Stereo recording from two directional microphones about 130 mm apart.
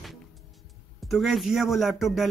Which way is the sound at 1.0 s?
Centre (ahead or behind).